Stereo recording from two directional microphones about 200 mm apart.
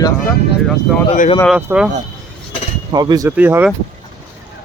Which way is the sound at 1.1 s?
35° left (ahead or behind).